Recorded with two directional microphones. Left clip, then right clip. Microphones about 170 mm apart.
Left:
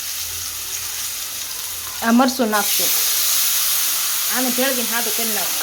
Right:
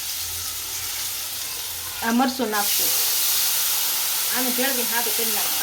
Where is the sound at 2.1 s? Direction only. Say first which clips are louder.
Left 6 dB; 50° left (ahead or behind).